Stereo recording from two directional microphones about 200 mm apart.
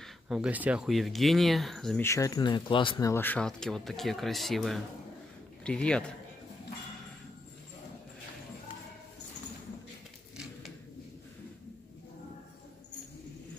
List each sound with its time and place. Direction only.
0.0 s speech: 5° right (ahead or behind)
2.0 s speech: 15° left (ahead or behind)
3.1 s speech: 10° left (ahead or behind)